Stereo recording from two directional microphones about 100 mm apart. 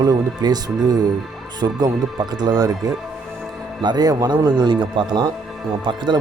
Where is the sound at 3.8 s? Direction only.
45° right (ahead or behind).